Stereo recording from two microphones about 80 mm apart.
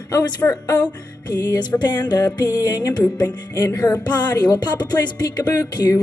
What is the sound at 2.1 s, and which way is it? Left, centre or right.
Speech, left.